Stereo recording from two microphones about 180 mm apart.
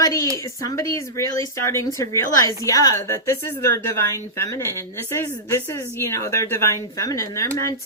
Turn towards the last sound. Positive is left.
turn(degrees=20)  # may be behind; listen again after turning